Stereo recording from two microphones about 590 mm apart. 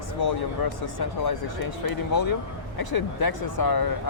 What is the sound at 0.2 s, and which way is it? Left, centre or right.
Speech, left.